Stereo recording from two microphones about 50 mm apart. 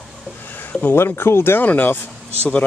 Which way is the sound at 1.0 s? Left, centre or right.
Left.